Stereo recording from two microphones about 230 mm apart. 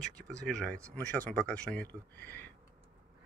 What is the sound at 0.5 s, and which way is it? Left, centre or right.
Speech, centre.